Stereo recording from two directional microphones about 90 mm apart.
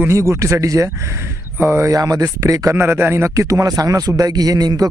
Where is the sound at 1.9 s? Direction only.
40° right (ahead or behind).